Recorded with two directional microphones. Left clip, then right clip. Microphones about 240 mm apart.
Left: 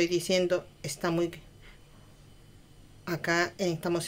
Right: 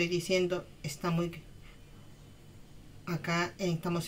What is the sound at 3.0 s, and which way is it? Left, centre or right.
Speech, left.